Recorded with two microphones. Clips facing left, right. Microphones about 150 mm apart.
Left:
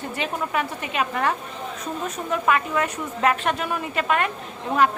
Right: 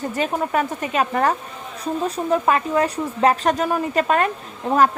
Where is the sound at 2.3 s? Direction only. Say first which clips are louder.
Right 3 dB; 35° right (ahead or behind).